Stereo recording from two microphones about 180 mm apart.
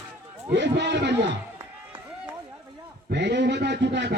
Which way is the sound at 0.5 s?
75° right (ahead or behind).